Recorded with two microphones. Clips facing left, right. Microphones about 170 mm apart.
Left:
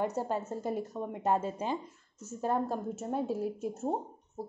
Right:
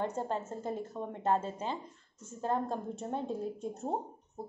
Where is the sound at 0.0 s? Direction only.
10° left (ahead or behind).